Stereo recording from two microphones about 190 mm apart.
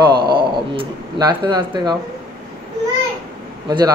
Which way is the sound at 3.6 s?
20° right (ahead or behind).